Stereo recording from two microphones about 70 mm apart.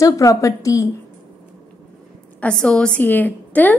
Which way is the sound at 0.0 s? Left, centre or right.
Left.